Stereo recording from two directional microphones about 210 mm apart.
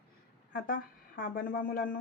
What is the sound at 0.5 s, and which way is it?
A woman's voice, 40° left (ahead or behind).